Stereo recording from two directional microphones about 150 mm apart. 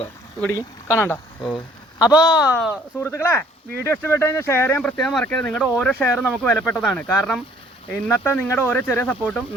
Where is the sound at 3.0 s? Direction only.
20° left (ahead or behind).